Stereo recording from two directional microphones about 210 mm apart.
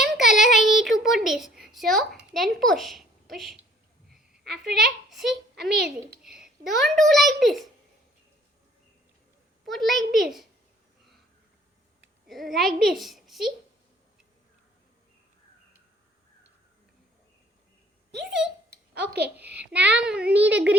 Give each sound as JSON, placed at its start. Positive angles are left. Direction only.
{"t": 0.0, "sound": "child singing", "side_deg": 0}
{"t": 2.3, "sound": "a child's voice", "side_deg": 0}
{"t": 4.6, "sound": "a child's voice", "side_deg": 0}
{"t": 9.6, "sound": "a child's voice", "side_deg": 0}
{"t": 12.3, "sound": "a child's voice", "side_deg": 0}
{"t": 18.2, "sound": "a child's voice", "side_deg": -5}
{"t": 18.9, "sound": "a child's voice", "side_deg": -50}
{"t": 19.4, "sound": "a child's voice", "side_deg": -5}